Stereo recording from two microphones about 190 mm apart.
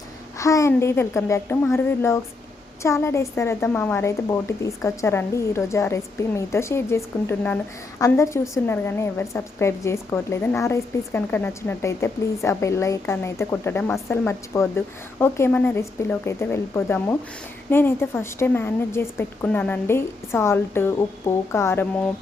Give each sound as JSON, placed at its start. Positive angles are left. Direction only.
{"t": 0.3, "sound": "a woman's voice", "side_deg": 15}